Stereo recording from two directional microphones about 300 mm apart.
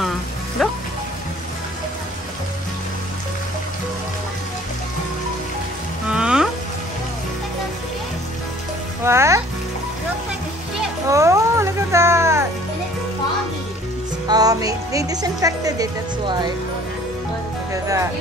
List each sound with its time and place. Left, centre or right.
0.6 s music: centre
6.0 s music: centre
9.0 s music: centre
11.1 s music: centre
14.2 s music: centre